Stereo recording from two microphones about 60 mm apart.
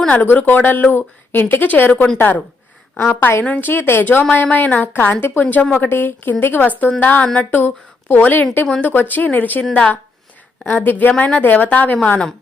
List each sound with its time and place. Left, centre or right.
0.1 s a woman's voice: left
3.4 s a woman's voice: left